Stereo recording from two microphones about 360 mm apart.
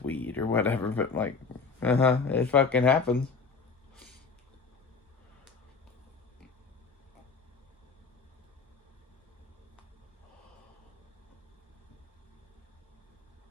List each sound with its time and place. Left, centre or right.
0.0 s speech: centre